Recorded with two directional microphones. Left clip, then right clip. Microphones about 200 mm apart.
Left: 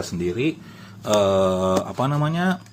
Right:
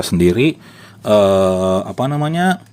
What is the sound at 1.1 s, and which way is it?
Speech, 45° right (ahead or behind).